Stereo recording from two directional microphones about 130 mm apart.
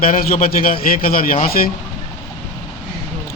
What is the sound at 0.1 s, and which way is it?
A man's voice, 90° left.